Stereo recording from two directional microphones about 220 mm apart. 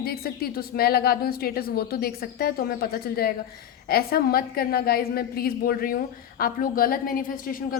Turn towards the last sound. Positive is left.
turn(degrees=40)  # may be behind; listen again after turning